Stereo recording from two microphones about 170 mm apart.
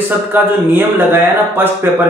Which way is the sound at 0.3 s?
10° right (ahead or behind).